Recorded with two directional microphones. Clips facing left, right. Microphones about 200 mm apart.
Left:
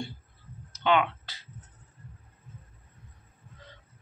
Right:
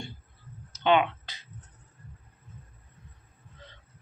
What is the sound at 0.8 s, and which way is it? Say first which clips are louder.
Speech: right 2 dB; 20° right (ahead or behind).